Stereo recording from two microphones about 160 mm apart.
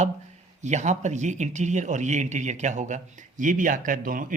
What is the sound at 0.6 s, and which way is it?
Speech, 45° right (ahead or behind).